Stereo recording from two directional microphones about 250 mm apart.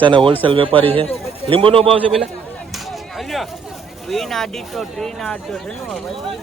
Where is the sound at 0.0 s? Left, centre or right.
Centre.